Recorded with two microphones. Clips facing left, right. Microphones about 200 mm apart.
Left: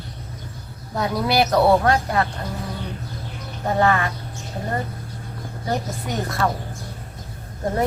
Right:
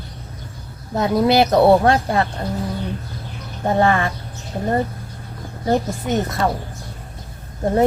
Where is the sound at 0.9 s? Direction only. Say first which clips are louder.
Right 6 dB; 25° right (ahead or behind).